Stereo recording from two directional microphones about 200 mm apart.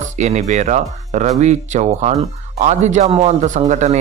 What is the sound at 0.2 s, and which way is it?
A man's voice, 35° right (ahead or behind).